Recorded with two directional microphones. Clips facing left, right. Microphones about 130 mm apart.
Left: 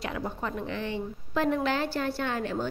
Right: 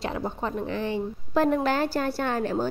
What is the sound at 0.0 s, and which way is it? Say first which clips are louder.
A woman's voice: right 3 dB; 30° right (ahead or behind).